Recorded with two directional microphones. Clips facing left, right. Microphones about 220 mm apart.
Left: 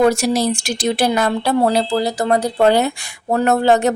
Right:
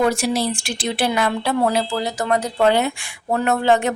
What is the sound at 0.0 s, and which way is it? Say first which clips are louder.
A woman's voice: left 4 dB; 40° left (ahead or behind).